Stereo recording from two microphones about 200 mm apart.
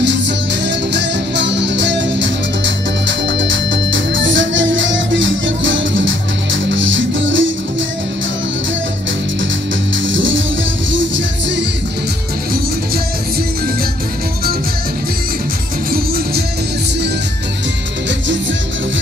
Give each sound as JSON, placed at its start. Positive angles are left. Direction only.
{"t": 0.7, "sound": "music", "side_deg": -60}
{"t": 10.0, "sound": "music", "side_deg": -70}